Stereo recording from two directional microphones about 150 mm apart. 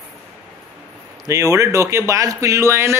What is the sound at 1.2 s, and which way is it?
A man's voice, 20° right (ahead or behind).